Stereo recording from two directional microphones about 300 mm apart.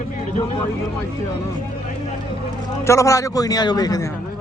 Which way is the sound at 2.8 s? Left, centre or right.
Centre.